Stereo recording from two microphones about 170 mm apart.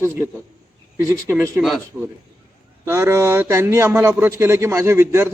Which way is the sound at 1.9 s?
10° right (ahead or behind).